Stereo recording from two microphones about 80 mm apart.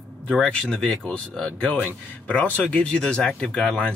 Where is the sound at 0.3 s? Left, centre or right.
Centre.